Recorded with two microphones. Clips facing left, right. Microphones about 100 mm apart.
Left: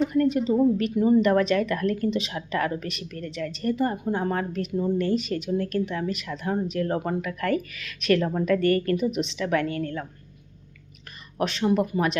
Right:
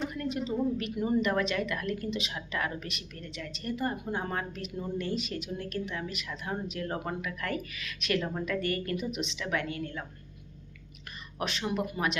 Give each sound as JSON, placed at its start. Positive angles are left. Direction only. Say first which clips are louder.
{"t": 0.1, "sound": "a woman's voice", "louder": "left 11 dB", "side_deg": 45}
{"t": 3.8, "sound": "a woman's voice", "louder": "left 5 dB", "side_deg": 35}
{"t": 11.3, "sound": "a woman's voice", "louder": "left 9 dB", "side_deg": 35}